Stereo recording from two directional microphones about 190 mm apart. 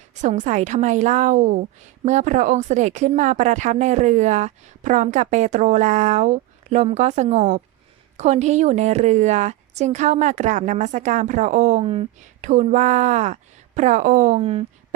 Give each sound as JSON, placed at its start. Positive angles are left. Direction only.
{"t": 0.1, "sound": "a woman's voice", "side_deg": -40}